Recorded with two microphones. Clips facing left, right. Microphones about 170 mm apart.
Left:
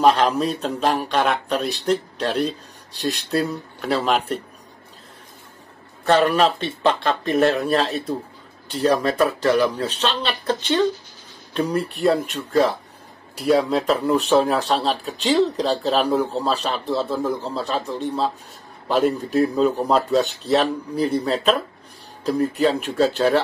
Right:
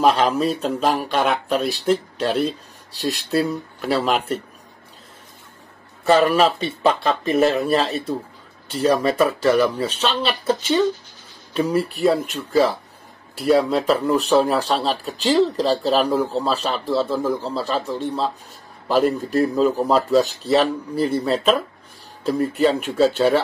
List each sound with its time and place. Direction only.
0.0 s speech: centre (ahead or behind)
6.0 s speech: 5° right (ahead or behind)